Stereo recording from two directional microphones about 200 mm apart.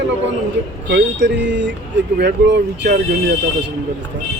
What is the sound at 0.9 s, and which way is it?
Speech, 60° right (ahead or behind).